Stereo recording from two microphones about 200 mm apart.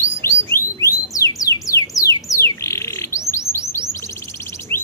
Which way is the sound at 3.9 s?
15° left (ahead or behind).